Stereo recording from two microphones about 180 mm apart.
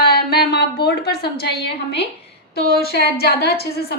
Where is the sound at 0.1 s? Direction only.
60° left (ahead or behind).